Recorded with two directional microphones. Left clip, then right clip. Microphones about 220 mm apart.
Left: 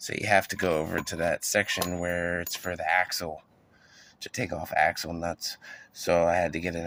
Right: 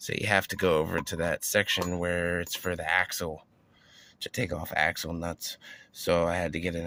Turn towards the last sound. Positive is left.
turn(degrees=-50)  # may be behind; listen again after turning